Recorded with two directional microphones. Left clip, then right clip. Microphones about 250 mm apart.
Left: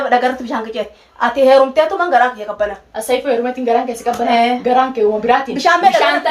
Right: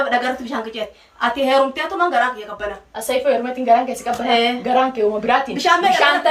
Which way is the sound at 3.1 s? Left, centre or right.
Centre.